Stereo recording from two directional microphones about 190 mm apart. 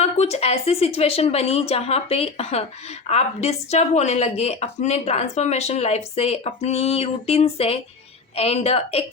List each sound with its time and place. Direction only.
0.0 s speech: 35° left (ahead or behind)